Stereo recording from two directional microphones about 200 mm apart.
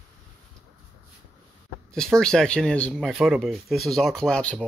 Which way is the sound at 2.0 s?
5° left (ahead or behind).